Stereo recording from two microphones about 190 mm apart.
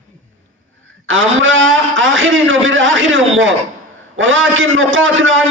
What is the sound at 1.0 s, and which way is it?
A man's voice, 90° right.